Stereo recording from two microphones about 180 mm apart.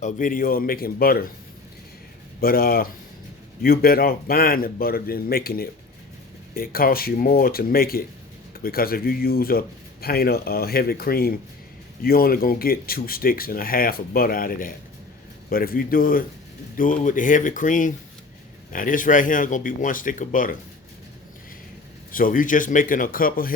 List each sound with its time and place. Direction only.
0.0 s speech: 50° left (ahead or behind)
2.4 s speech: 55° left (ahead or behind)
22.1 s speech: 50° left (ahead or behind)